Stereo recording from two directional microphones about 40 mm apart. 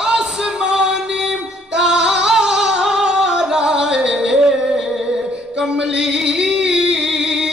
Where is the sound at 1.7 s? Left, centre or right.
Centre.